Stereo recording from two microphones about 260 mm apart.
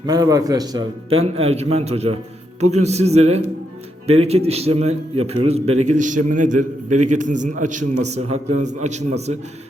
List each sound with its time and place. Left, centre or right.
0.0 s a man's voice: centre